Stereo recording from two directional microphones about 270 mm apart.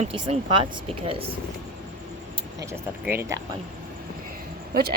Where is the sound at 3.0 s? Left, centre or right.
Centre.